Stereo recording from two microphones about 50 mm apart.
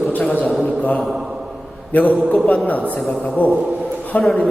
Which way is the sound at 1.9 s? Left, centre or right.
Left.